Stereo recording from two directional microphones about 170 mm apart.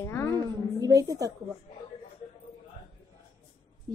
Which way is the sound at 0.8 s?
20° right (ahead or behind).